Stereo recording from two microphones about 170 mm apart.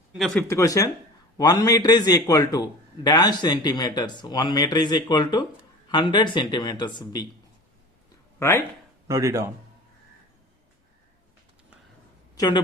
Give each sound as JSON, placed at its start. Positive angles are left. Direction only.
{"t": 0.3, "sound": "a man's voice", "side_deg": 15}
{"t": 8.4, "sound": "speech", "side_deg": 15}
{"t": 9.0, "sound": "speech", "side_deg": -20}
{"t": 12.4, "sound": "a woman's voice", "side_deg": 25}